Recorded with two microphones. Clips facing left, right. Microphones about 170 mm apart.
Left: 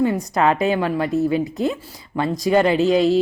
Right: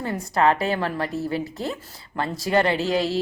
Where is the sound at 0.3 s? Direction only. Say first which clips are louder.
Left 1 dB; 15° left (ahead or behind).